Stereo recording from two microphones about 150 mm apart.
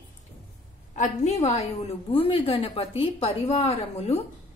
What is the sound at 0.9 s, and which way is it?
A woman's voice, 50° left (ahead or behind).